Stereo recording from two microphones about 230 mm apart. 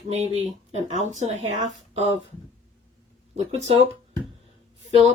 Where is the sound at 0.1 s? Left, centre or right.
Right.